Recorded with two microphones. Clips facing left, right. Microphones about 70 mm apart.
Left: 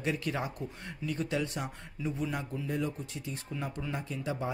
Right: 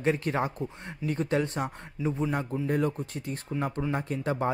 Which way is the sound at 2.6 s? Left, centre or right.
Right.